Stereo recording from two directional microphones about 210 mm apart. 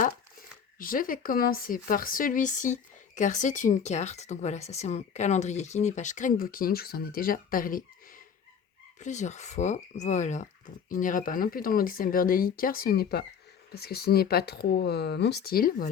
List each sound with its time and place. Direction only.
0.8 s speech: 40° left (ahead or behind)
9.0 s speech: 35° left (ahead or behind)